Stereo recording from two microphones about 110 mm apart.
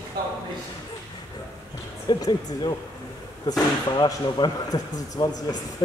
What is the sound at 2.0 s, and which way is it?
Speech, 40° left (ahead or behind).